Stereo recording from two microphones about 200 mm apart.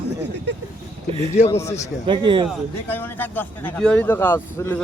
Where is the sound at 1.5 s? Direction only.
15° left (ahead or behind).